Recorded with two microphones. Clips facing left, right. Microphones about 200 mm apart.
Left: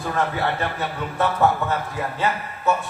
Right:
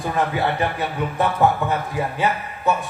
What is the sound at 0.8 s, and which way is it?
Speech, 15° right (ahead or behind).